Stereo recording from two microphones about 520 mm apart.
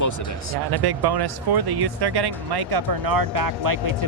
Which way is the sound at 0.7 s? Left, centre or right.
Right.